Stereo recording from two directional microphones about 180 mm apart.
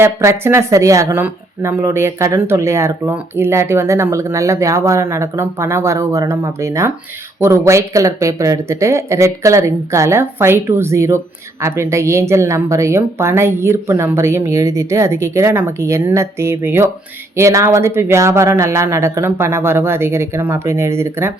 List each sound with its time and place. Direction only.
0.0 s speech: 15° right (ahead or behind)